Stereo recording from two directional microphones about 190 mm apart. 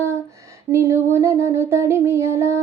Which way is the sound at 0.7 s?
15° right (ahead or behind).